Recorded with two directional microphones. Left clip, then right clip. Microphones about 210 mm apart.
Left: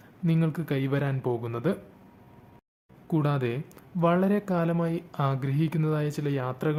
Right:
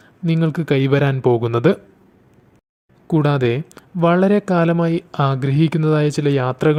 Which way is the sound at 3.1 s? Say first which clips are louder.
Right 11 dB; 30° right (ahead or behind).